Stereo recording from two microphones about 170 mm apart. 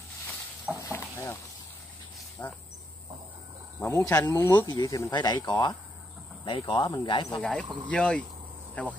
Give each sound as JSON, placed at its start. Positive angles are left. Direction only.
{"t": 0.9, "sound": "frying", "side_deg": 15}
{"t": 2.4, "sound": "speech", "side_deg": 10}
{"t": 3.8, "sound": "speech", "side_deg": 20}
{"t": 7.9, "sound": "speech", "side_deg": 5}